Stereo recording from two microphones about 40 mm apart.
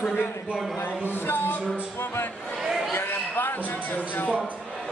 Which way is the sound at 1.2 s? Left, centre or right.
Left.